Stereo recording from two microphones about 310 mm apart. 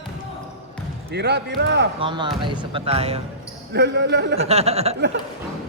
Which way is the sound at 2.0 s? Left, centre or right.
Centre.